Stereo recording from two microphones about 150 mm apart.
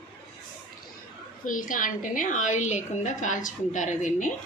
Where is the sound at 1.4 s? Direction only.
65° left (ahead or behind).